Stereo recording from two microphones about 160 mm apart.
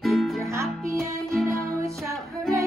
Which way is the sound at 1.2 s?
Centre (ahead or behind).